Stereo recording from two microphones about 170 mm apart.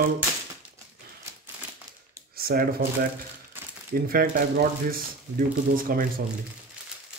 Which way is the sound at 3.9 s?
60° right (ahead or behind).